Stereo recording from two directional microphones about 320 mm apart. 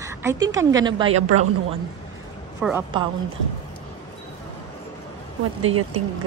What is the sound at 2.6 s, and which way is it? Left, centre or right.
Speech, centre.